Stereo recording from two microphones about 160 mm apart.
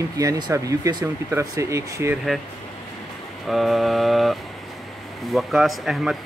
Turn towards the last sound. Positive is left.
turn(degrees=0)  # may be behind; listen again after turning